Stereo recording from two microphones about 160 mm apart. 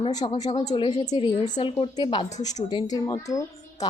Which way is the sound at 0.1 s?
25° left (ahead or behind).